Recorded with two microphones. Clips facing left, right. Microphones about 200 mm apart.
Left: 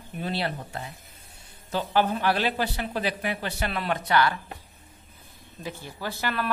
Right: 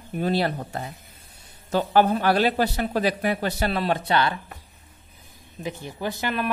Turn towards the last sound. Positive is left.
turn(degrees=-15)  # may be behind; listen again after turning